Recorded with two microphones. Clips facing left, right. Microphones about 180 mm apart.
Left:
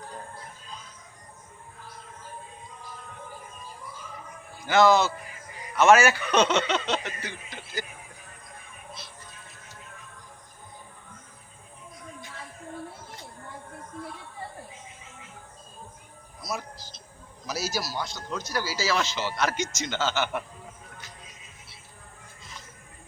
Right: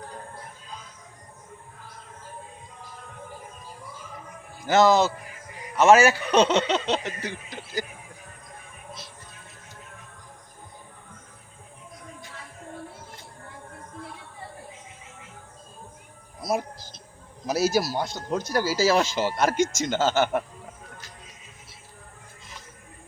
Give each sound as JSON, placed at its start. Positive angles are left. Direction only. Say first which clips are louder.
{"t": 4.6, "sound": "speech", "louder": "right 1 dB", "side_deg": -40}
{"t": 16.4, "sound": "music", "louder": "right 8 dB", "side_deg": -55}
{"t": 17.4, "sound": "speech", "louder": "right 9 dB", "side_deg": -55}